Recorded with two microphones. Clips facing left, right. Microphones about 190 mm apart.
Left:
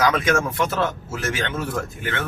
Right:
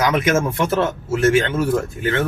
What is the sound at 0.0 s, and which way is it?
Speech, 20° right (ahead or behind).